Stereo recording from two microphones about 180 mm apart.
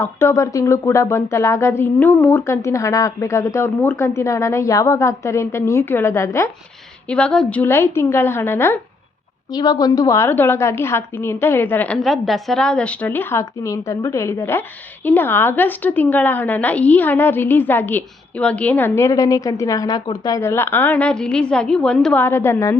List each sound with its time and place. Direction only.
0.0 s a woman's voice: 15° left (ahead or behind)
7.1 s a woman's voice: 5° left (ahead or behind)